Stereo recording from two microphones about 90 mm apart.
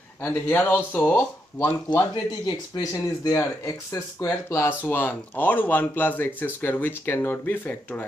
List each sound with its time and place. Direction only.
0.2 s speech: 20° left (ahead or behind)
1.9 s speech: 50° left (ahead or behind); by 8.0 s 20° left (ahead or behind)